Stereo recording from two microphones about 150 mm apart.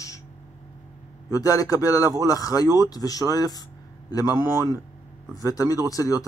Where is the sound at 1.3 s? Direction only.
25° left (ahead or behind).